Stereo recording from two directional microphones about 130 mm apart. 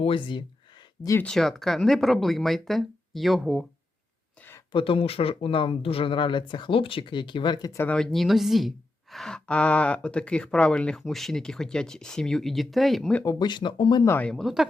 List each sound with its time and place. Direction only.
0.0 s speech: 40° left (ahead or behind)
1.2 s speech: 5° left (ahead or behind)
4.7 s speech: 40° left (ahead or behind)
7.7 s speech: 20° left (ahead or behind)
7.9 s speech: 5° left (ahead or behind)
13.2 s speech: 35° left (ahead or behind)
14.2 s speech: 5° left (ahead or behind)